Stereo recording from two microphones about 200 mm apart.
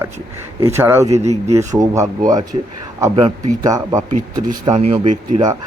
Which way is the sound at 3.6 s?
15° right (ahead or behind).